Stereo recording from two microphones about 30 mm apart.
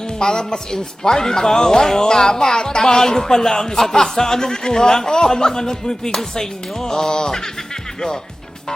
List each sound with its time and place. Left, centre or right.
0.2 s speech: left